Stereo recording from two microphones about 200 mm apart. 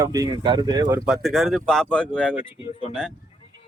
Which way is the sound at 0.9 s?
Centre (ahead or behind).